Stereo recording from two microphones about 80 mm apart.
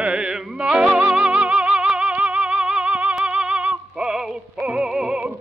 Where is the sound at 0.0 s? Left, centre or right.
Centre.